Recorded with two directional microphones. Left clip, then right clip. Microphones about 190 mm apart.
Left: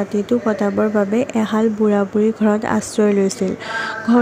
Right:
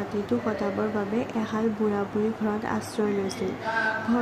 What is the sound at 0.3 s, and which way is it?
Speech, 35° left (ahead or behind).